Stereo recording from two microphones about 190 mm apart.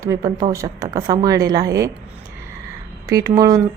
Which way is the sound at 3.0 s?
20° right (ahead or behind).